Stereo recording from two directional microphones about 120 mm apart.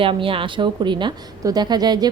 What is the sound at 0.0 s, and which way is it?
A woman's voice, 45° right (ahead or behind).